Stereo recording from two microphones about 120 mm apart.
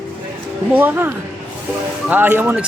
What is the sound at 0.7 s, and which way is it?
Speech, 15° right (ahead or behind).